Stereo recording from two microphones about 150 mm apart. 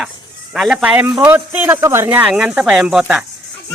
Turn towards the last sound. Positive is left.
turn(degrees=-5)  # may be behind; listen again after turning